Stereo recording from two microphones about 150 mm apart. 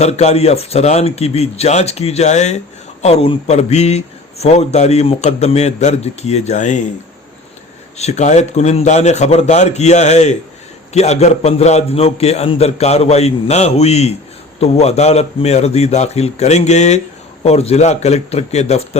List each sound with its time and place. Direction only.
0.0 s a man's voice: 45° left (ahead or behind)
7.9 s a man's voice: 50° left (ahead or behind)